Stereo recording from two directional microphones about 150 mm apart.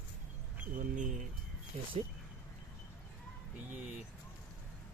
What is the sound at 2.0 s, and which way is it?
Speech, 45° right (ahead or behind).